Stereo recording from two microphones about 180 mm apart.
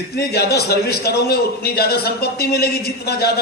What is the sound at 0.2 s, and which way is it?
A man's voice, 60° left (ahead or behind).